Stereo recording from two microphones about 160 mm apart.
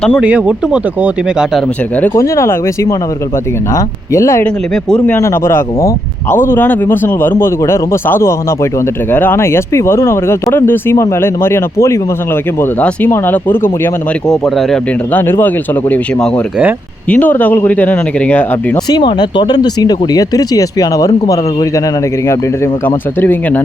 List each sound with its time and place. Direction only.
0.2 s speech: 5° right (ahead or behind)
2.0 s speech: 20° left (ahead or behind)
4.7 s speech: 5° left (ahead or behind)
14.4 s speech: centre (ahead or behind)
15.1 s speech: 10° left (ahead or behind)
18.9 s speech: 25° left (ahead or behind)
22.3 s speech: 15° left (ahead or behind)